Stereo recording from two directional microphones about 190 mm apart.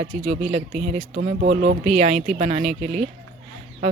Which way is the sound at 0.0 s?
35° right (ahead or behind).